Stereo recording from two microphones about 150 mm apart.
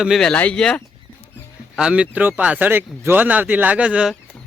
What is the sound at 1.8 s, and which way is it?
Speech, 10° right (ahead or behind).